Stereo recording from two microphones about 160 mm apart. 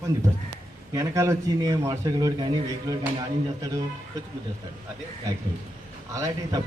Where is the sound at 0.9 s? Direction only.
20° right (ahead or behind).